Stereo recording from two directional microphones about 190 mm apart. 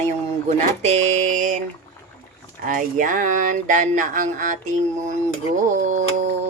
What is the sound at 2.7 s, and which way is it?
Music, 45° right (ahead or behind).